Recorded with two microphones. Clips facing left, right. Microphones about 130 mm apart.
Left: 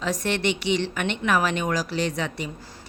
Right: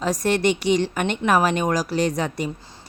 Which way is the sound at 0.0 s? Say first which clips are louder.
Right 5 dB; 40° right (ahead or behind).